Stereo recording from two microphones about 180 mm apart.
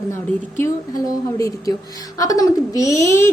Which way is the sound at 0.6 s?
15° left (ahead or behind).